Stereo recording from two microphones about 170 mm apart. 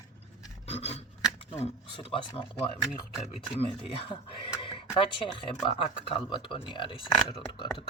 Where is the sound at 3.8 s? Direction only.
30° left (ahead or behind).